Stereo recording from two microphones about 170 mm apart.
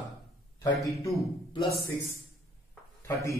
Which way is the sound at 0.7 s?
Centre (ahead or behind).